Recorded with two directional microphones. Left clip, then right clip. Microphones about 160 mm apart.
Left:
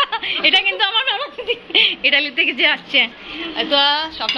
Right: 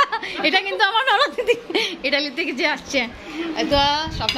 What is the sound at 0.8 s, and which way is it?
Speech, 45° right (ahead or behind).